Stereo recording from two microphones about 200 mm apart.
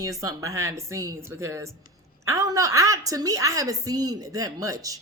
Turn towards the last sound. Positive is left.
turn(degrees=-15)  # may be behind; listen again after turning